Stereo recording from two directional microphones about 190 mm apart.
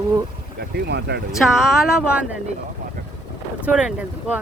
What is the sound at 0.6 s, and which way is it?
Speech, 60° right (ahead or behind).